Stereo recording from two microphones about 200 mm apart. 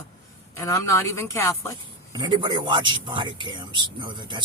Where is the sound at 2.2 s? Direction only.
20° right (ahead or behind).